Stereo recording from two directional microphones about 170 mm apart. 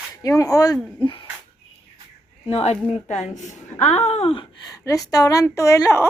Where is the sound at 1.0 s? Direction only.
30° left (ahead or behind).